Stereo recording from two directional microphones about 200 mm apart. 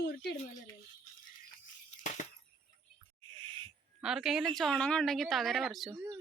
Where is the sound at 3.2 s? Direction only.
25° right (ahead or behind).